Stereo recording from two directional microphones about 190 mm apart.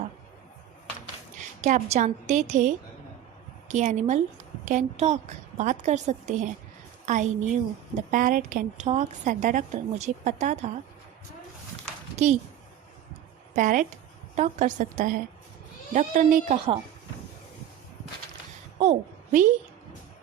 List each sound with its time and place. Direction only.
1.6 s a woman's voice: 40° right (ahead or behind)
12.1 s speech: 40° right (ahead or behind)
13.6 s a woman's voice: 40° right (ahead or behind)
18.8 s a woman's voice: 40° right (ahead or behind)